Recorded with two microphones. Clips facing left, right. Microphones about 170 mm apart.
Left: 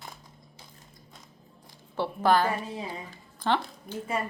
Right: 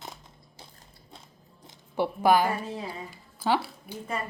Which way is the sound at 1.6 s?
15° right (ahead or behind).